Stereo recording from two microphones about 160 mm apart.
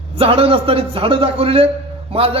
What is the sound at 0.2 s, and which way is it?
Speech, 35° right (ahead or behind).